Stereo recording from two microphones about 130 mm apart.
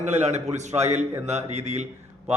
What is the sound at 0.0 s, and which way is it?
A man's voice, 60° right (ahead or behind).